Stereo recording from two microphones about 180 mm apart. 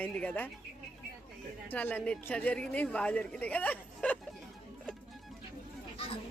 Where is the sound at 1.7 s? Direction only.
10° left (ahead or behind).